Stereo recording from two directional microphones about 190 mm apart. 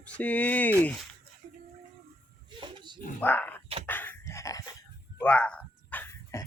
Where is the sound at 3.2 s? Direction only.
10° left (ahead or behind).